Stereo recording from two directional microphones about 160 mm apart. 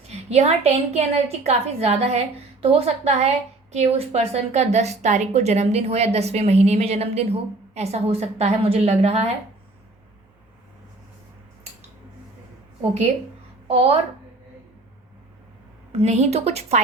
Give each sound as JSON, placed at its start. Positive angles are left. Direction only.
{"t": 0.1, "sound": "a woman's voice", "side_deg": -40}
{"t": 13.7, "sound": "a woman's voice", "side_deg": -40}
{"t": 15.9, "sound": "a woman's voice", "side_deg": -40}